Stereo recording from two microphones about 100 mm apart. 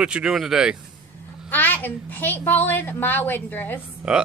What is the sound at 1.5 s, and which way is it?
A woman's voice, 20° left (ahead or behind).